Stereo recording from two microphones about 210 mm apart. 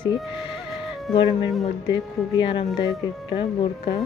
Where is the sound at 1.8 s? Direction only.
20° left (ahead or behind).